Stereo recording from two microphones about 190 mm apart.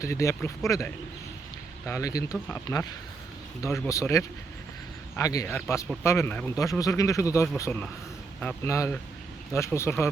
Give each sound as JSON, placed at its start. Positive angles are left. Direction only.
{"t": 0.0, "sound": "speech", "side_deg": 15}